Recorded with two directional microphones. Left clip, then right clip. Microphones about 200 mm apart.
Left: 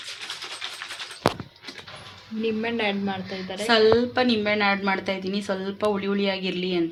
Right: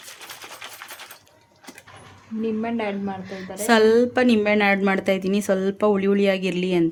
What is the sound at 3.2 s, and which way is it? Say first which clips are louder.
A woman's voice: right 3 dB; 55° right (ahead or behind).